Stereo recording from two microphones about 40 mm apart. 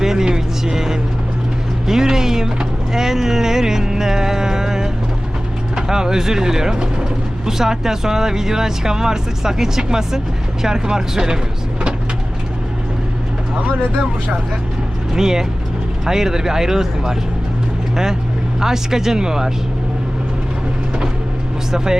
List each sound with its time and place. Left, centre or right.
0.0 s vehicle: centre
5.7 s speech: centre
15.1 s speech: centre